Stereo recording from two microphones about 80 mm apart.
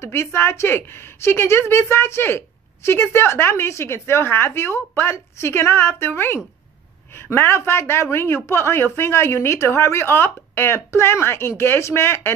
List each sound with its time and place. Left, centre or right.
0.0 s a woman's voice: left